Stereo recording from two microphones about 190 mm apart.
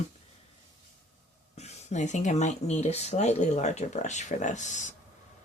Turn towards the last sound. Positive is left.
turn(degrees=40)  # may be behind; listen again after turning